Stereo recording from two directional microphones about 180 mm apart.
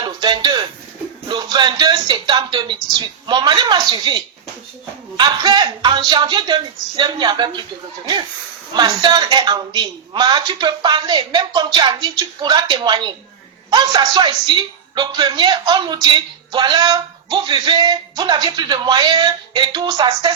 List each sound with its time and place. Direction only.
0.0 s a sound: 25° right (ahead or behind)
3.2 s a man's voice: 25° right (ahead or behind)
8.7 s a man's voice: 25° right (ahead or behind)